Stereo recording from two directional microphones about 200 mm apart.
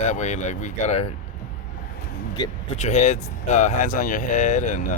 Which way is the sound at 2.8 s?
35° left (ahead or behind).